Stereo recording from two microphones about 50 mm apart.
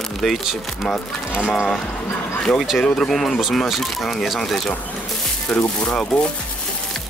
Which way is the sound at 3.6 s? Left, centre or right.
Centre.